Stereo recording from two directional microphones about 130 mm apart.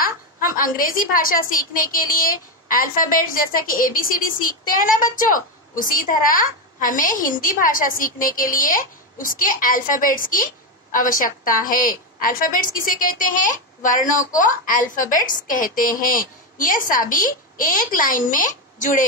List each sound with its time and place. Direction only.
0.0 s a woman's voice: 90° left